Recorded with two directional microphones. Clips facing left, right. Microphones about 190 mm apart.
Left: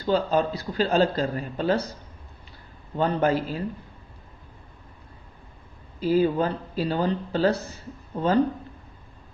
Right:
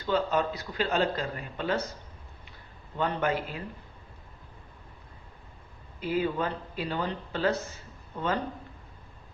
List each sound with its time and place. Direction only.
0.0 s a man's voice: 35° left (ahead or behind)
2.9 s a man's voice: 35° left (ahead or behind)
6.0 s a man's voice: 35° left (ahead or behind)